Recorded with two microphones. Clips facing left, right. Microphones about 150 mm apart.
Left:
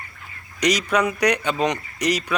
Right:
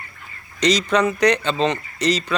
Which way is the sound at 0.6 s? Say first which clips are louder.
Right 2 dB; 10° left (ahead or behind).